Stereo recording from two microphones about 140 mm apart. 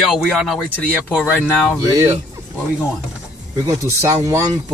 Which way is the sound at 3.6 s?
20° right (ahead or behind).